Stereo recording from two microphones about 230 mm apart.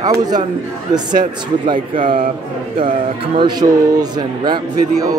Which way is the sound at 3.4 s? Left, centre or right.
Centre.